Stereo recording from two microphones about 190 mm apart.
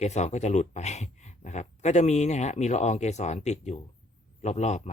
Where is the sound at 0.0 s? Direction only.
35° left (ahead or behind).